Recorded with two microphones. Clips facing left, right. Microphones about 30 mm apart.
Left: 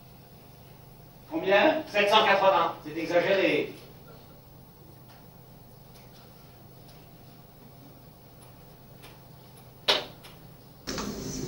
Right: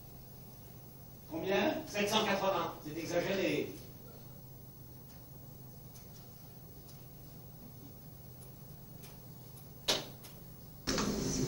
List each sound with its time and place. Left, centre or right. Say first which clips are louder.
1.3 s a man's voice: left 10 dB; left
9.8 s a sound: left 9 dB; left
10.9 s vehicle: even; centre